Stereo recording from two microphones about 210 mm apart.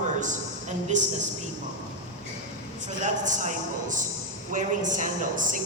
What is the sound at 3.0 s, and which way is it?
A man's voice, 35° right (ahead or behind).